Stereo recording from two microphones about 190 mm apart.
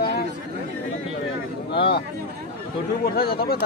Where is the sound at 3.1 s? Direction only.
55° left (ahead or behind).